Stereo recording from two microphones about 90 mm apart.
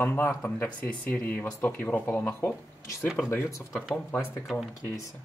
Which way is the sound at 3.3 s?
30° left (ahead or behind).